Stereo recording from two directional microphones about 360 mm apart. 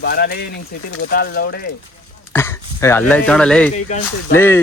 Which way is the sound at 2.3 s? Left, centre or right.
Centre.